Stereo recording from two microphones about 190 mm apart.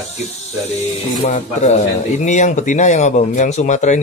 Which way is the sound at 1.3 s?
40° left (ahead or behind).